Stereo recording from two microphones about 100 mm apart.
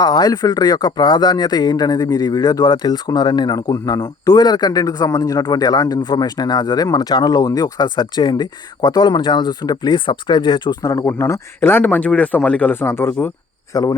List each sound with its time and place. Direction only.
0.0 s speech: 45° left (ahead or behind)
10.9 s speech: 30° left (ahead or behind)
13.7 s speech: 40° left (ahead or behind)